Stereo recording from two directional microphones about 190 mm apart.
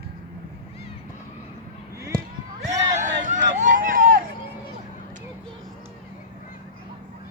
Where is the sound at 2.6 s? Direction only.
40° right (ahead or behind).